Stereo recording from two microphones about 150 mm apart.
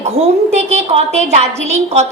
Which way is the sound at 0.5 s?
45° right (ahead or behind).